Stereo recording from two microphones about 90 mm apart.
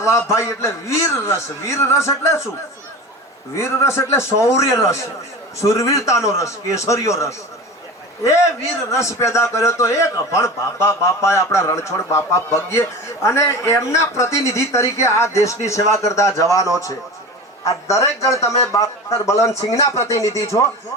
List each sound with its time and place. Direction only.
0.0 s a man's voice: 35° left (ahead or behind)
3.6 s a man's voice: 30° left (ahead or behind)
8.9 s a man's voice: 35° left (ahead or behind)